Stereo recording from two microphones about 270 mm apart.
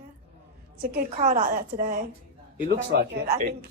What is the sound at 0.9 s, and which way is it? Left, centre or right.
A woman's voice, right.